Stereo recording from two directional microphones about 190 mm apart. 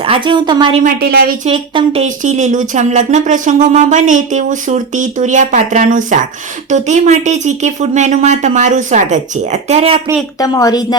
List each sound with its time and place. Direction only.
0.0 s a woman's voice: 25° right (ahead or behind)
0.8 s a woman's voice: 50° right (ahead or behind)
1.5 s speech: 30° right (ahead or behind)
10.4 s speech: 20° left (ahead or behind)